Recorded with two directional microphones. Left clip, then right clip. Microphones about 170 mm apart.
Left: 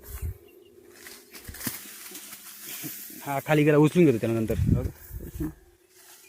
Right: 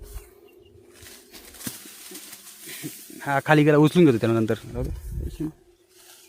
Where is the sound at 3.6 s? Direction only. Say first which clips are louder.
Left 1 dB; 20° right (ahead or behind).